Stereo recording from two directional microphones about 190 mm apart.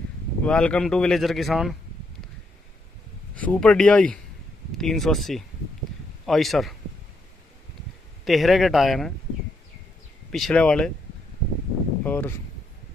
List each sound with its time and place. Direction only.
0.5 s speech: 5° left (ahead or behind)
3.3 s speech: 5° left (ahead or behind)
8.3 s speech: centre (ahead or behind)
10.3 s speech: 5° left (ahead or behind)
12.0 s speech: 10° left (ahead or behind)